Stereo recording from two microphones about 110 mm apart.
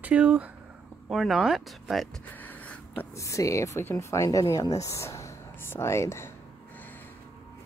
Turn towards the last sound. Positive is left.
turn(degrees=25)  # may be behind; listen again after turning